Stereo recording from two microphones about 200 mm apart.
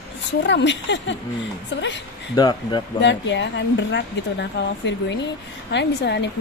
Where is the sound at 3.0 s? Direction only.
60° left (ahead or behind).